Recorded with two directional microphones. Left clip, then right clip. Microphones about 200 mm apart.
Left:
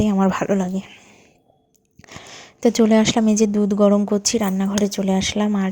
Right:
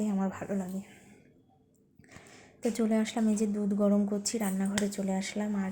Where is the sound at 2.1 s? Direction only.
35° left (ahead or behind).